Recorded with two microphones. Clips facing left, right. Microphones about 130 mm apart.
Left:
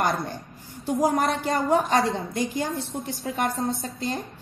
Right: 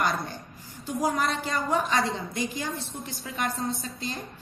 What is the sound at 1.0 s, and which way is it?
A woman's voice, 55° left (ahead or behind).